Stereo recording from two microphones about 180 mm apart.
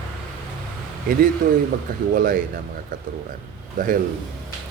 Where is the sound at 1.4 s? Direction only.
50° right (ahead or behind).